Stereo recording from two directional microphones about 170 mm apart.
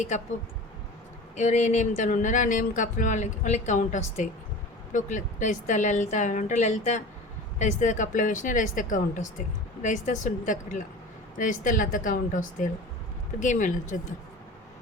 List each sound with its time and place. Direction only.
1.4 s speech: 45° left (ahead or behind)